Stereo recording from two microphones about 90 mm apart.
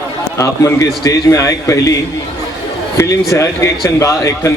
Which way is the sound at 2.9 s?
35° left (ahead or behind).